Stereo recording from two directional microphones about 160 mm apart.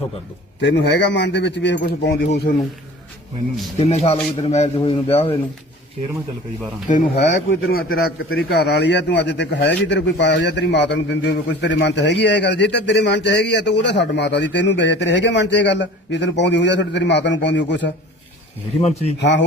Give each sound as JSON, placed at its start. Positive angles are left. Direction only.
{"t": 0.6, "sound": "a man's voice", "side_deg": 90}
{"t": 2.5, "sound": "speech", "side_deg": 60}
{"t": 3.8, "sound": "speech", "side_deg": 40}
{"t": 7.2, "sound": "a man's voice", "side_deg": 90}
{"t": 18.8, "sound": "speech", "side_deg": 40}
{"t": 19.2, "sound": "a man's voice", "side_deg": 90}